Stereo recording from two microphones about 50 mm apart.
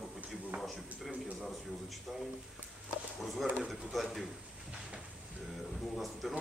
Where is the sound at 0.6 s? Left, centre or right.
Centre.